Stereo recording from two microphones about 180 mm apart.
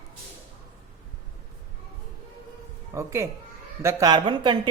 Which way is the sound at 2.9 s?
15° right (ahead or behind).